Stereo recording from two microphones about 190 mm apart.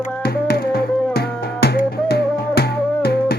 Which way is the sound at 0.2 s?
55° left (ahead or behind).